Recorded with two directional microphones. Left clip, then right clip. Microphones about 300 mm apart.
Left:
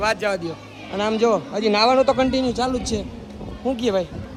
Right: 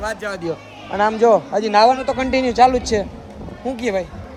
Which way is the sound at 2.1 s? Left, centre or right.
Centre.